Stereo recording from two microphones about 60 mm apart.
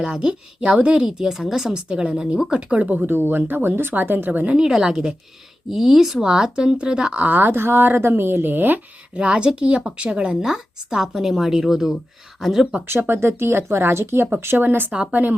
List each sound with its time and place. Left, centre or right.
0.0 s speech: centre
4.5 s speech: centre; by 8.8 s right
9.1 s speech: centre
12.9 s speech: right